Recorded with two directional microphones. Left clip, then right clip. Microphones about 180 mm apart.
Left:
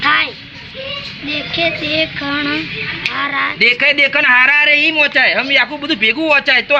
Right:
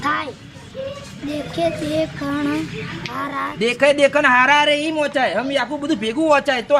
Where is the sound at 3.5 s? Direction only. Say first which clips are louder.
Left 4 dB; 20° right (ahead or behind).